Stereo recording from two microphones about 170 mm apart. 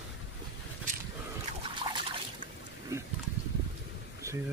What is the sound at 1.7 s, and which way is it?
Trickle, 30° right (ahead or behind).